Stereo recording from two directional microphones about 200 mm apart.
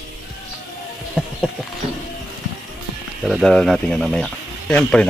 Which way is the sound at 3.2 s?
Centre (ahead or behind).